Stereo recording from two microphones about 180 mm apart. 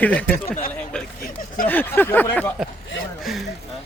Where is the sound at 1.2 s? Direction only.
50° left (ahead or behind).